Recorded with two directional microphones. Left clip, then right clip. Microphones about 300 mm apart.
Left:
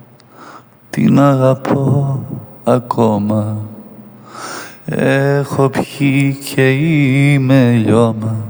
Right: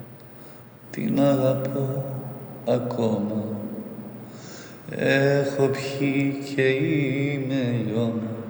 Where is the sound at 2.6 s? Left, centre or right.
Left.